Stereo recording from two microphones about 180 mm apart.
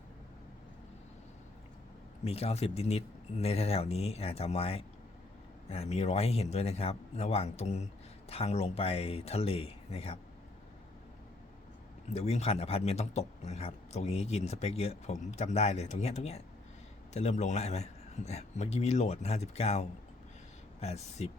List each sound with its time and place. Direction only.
2.2 s speech: 35° left (ahead or behind)
12.1 s speech: 35° left (ahead or behind)